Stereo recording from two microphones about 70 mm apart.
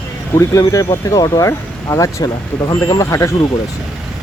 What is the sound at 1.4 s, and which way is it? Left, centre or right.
Speech, left.